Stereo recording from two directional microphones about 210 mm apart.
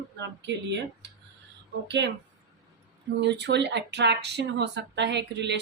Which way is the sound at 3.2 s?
55° right (ahead or behind).